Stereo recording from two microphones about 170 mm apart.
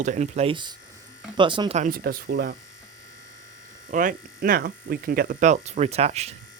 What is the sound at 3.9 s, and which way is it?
Speech, 55° right (ahead or behind).